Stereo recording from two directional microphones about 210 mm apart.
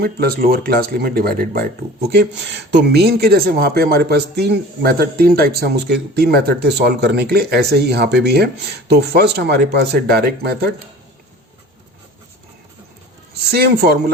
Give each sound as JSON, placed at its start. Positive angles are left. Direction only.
{"t": 0.0, "sound": "speech", "side_deg": -45}
{"t": 13.5, "sound": "speech", "side_deg": -50}